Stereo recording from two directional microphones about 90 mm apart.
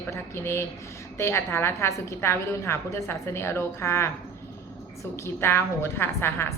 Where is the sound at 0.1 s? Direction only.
30° left (ahead or behind).